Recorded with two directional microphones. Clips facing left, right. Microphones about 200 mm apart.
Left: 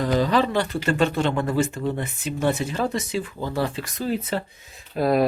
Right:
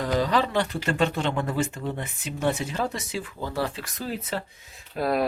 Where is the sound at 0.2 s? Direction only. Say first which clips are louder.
Left 3 dB; 15° right (ahead or behind).